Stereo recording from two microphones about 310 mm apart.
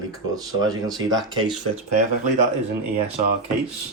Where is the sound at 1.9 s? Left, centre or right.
Right.